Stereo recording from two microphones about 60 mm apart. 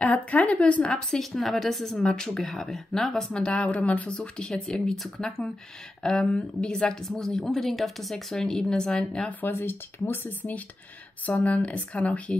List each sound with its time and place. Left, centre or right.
0.0 s a woman's voice: left
4.2 s a woman's voice: centre
9.4 s speech: left